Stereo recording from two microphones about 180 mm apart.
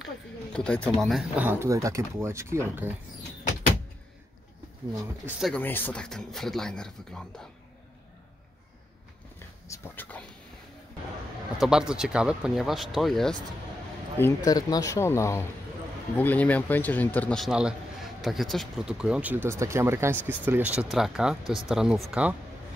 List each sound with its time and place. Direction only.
0.0 s speech: 5° left (ahead or behind); by 2.6 s 15° right (ahead or behind)
5.4 s speech: 10° left (ahead or behind)
9.7 s a man's voice: 10° left (ahead or behind)
11.5 s speech: 5° right (ahead or behind)
14.1 s a man's voice: 15° left (ahead or behind); by 22.3 s centre (ahead or behind)